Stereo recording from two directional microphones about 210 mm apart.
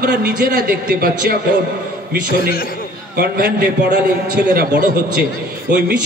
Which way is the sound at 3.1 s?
45° right (ahead or behind).